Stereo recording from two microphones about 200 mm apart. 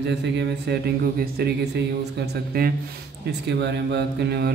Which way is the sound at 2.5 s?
50° right (ahead or behind).